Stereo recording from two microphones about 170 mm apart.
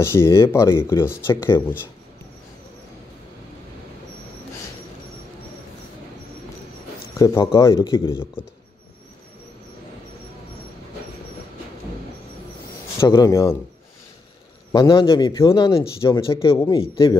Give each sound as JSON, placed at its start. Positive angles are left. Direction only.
{"t": 0.0, "sound": "speech", "side_deg": 15}
{"t": 7.2, "sound": "a man's voice", "side_deg": 20}
{"t": 8.1, "sound": "speech", "side_deg": 15}
{"t": 13.0, "sound": "a man's voice", "side_deg": 20}
{"t": 14.7, "sound": "a man's voice", "side_deg": 25}